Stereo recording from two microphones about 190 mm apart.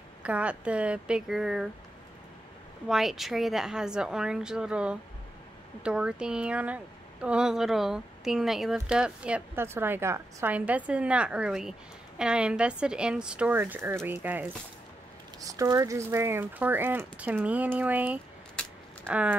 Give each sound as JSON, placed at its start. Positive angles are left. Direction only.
{"t": 0.2, "sound": "speech", "side_deg": -5}
{"t": 2.9, "sound": "speech", "side_deg": 0}
{"t": 18.6, "sound": "a sound", "side_deg": 5}
{"t": 19.0, "sound": "speech", "side_deg": -5}